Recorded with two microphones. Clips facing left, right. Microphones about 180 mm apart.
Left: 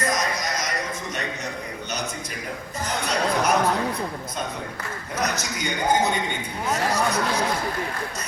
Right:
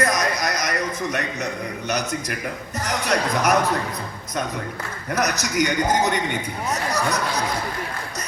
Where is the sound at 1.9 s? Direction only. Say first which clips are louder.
Right 8 dB; 70° right (ahead or behind).